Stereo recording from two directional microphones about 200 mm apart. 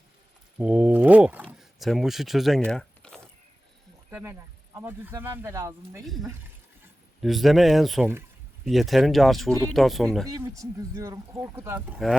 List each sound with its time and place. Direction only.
0.6 s speech: 5° right (ahead or behind)
2.6 s a sound: 5° left (ahead or behind)
4.1 s speech: 10° right (ahead or behind)
6.1 s speech: centre (ahead or behind)
10.2 s speech: 15° right (ahead or behind)